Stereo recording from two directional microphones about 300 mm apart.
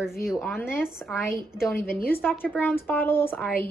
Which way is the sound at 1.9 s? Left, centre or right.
Left.